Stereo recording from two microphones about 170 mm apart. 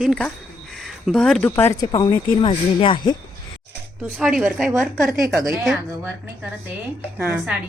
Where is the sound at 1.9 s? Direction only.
30° left (ahead or behind).